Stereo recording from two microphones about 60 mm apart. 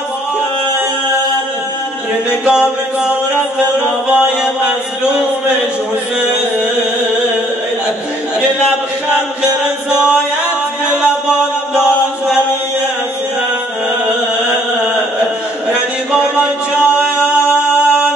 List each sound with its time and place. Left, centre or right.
2.4 s music: centre
9.1 s music: centre
16.1 s music: centre